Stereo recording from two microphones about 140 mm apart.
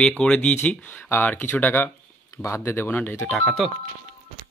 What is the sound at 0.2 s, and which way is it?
Speech, 10° left (ahead or behind).